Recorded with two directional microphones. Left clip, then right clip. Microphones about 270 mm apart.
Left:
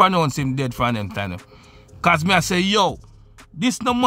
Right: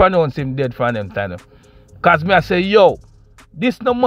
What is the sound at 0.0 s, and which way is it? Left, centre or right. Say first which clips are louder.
Speech: right 3 dB; centre.